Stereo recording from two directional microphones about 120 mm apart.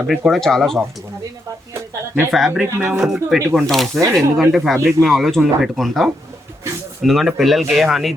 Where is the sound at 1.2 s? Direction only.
25° right (ahead or behind).